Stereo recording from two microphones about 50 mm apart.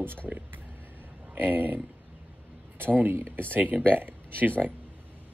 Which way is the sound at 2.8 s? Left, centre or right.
Right.